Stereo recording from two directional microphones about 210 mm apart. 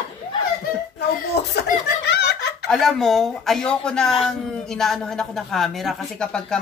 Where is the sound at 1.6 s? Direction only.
50° left (ahead or behind).